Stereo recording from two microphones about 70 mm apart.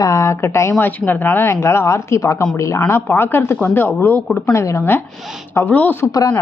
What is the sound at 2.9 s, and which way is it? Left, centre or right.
Speech, left.